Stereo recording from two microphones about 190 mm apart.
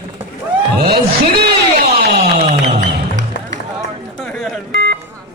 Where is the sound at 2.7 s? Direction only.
40° right (ahead or behind).